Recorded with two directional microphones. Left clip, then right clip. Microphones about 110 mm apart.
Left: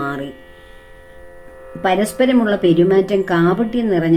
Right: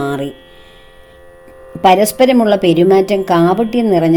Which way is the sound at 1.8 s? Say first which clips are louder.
Right 7 dB; 60° right (ahead or behind).